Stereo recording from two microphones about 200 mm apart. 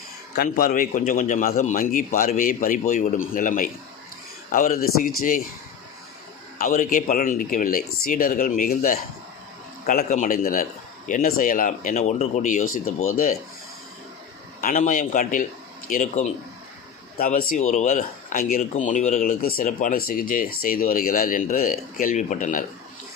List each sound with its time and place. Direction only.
0.3 s a man's voice: 45° left (ahead or behind)
6.6 s speech: 40° left (ahead or behind)
12.8 s speech: 90° left
14.6 s a man's voice: 40° left (ahead or behind)